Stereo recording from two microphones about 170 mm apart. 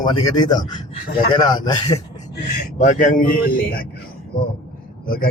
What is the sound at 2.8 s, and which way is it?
Speech, 50° left (ahead or behind).